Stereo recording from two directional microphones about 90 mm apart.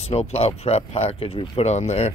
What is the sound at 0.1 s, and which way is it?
Speech, 90° left.